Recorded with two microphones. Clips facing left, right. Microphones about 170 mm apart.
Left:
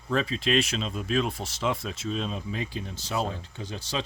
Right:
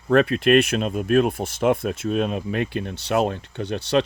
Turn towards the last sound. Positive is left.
turn(degrees=-65)  # may be behind; listen again after turning